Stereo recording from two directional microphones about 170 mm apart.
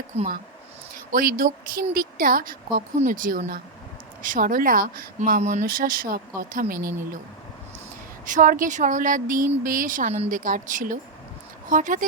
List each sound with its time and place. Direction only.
0.1 s speech: 35° right (ahead or behind)
0.9 s a woman's voice: 60° right (ahead or behind)
5.4 s a woman's voice: 45° right (ahead or behind)
8.2 s speech: 50° right (ahead or behind)